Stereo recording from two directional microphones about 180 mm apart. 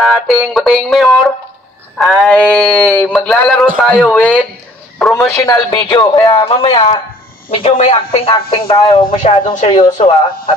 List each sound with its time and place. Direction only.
0.0 s speech: centre (ahead or behind)
5.3 s speech: 20° left (ahead or behind)
9.2 s speech: 40° left (ahead or behind)
9.7 s speech: 25° left (ahead or behind)